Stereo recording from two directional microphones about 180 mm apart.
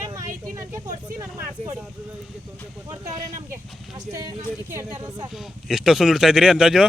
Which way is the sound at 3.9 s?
20° right (ahead or behind).